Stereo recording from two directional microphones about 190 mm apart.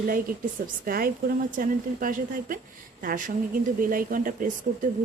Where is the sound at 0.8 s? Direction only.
50° right (ahead or behind).